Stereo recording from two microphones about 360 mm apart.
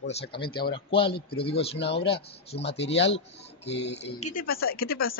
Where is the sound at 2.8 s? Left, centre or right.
Left.